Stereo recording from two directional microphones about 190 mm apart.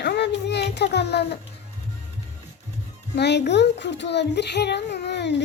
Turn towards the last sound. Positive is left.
turn(degrees=65)  # may be behind; listen again after turning